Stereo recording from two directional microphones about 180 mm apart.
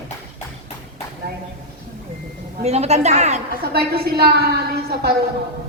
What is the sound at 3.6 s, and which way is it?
Speech, 60° right (ahead or behind).